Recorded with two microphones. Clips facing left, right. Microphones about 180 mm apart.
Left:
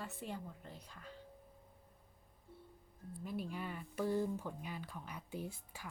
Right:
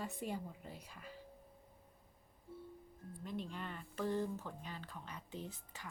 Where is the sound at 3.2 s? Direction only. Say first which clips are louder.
Left 2 dB; 5° left (ahead or behind).